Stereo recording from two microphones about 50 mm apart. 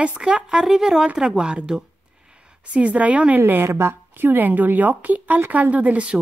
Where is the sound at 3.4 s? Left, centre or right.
Right.